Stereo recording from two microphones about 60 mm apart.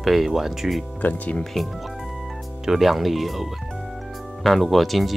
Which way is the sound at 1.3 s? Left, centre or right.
Centre.